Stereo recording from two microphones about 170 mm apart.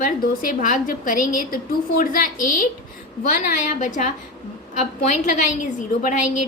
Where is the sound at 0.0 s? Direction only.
55° left (ahead or behind).